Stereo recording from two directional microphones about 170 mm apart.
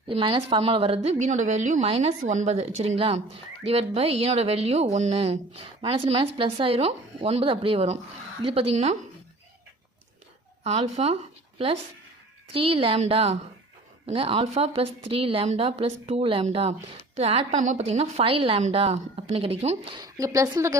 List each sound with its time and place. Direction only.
0.1 s speech: 30° right (ahead or behind)
10.6 s speech: 40° right (ahead or behind)
20.0 s a woman's voice: 20° right (ahead or behind)